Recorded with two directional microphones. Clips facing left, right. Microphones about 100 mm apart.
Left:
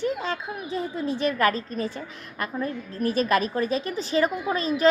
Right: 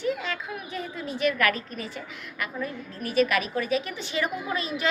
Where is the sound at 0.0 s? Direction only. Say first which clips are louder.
Left 2 dB; 35° left (ahead or behind).